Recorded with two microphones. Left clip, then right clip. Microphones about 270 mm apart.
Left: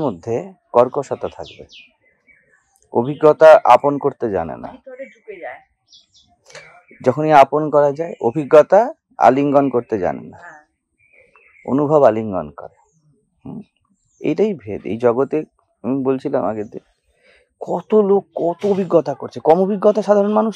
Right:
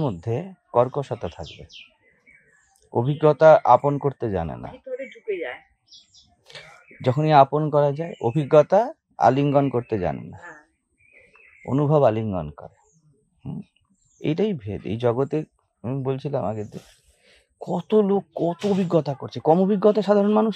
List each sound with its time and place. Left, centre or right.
0.0 s speech: right
2.9 s speech: right
6.4 s speech: right
11.6 s speech: right
13.4 s a sound: right
14.2 s speech: right
17.2 s a sound: right
18.3 s speech: right